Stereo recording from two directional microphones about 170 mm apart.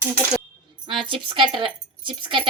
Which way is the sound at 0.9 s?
30° right (ahead or behind).